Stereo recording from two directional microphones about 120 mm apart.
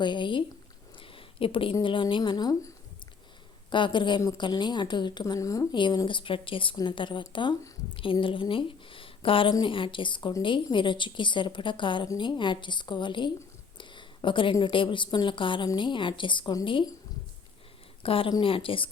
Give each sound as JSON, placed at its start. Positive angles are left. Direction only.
{"t": 0.0, "sound": "a woman's voice", "side_deg": 40}
{"t": 0.9, "sound": "a sound", "side_deg": 45}
{"t": 1.8, "sound": "a woman's voice", "side_deg": 45}
{"t": 5.2, "sound": "a woman's voice", "side_deg": 25}
{"t": 5.7, "sound": "a woman's voice", "side_deg": 40}
{"t": 13.7, "sound": "a sound", "side_deg": 40}
{"t": 14.6, "sound": "a woman's voice", "side_deg": 45}
{"t": 18.0, "sound": "a woman's voice", "side_deg": 50}